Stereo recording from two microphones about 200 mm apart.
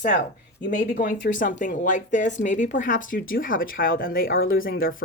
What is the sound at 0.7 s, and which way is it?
A woman's voice, 50° left (ahead or behind).